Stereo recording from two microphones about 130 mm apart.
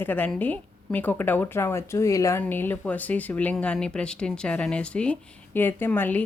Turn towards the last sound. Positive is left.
turn(degrees=15)  # may be behind; listen again after turning